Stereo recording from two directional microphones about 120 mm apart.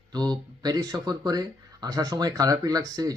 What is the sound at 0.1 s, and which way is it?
Speech, 35° right (ahead or behind).